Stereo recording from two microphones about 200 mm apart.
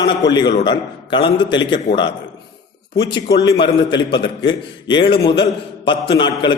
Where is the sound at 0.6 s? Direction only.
25° left (ahead or behind).